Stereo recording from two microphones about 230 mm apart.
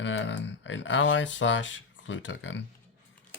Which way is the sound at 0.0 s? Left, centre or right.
Left.